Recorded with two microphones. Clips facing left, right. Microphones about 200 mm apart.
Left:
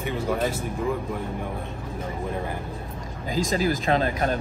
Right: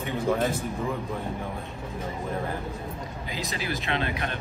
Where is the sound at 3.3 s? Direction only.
45° left (ahead or behind).